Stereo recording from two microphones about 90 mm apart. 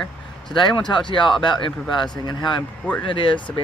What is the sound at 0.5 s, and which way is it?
Speech, 60° left (ahead or behind).